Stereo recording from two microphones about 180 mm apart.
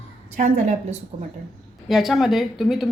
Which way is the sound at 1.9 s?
Centre (ahead or behind).